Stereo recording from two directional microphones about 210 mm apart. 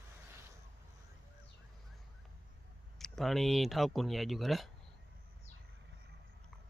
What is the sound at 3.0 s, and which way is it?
Speech, centre (ahead or behind).